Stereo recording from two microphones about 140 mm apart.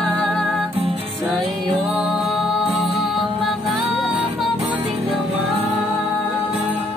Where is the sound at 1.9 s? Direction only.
5° right (ahead or behind).